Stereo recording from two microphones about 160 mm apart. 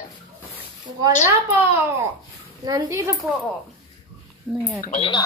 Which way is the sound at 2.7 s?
20° right (ahead or behind).